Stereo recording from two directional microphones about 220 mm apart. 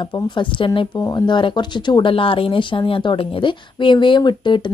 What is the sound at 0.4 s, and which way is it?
Speech, 20° left (ahead or behind).